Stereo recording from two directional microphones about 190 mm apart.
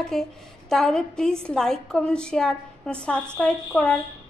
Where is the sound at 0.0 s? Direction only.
Centre (ahead or behind).